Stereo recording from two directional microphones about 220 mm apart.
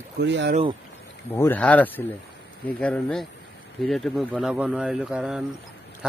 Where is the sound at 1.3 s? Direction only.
10° left (ahead or behind).